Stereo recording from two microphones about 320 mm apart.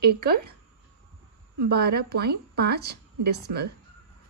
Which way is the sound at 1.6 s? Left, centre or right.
Right.